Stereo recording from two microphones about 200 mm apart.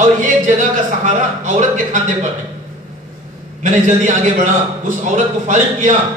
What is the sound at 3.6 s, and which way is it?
A man's voice, 40° right (ahead or behind).